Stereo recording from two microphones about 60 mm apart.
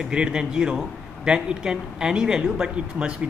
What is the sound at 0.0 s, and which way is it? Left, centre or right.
A man's voice, centre.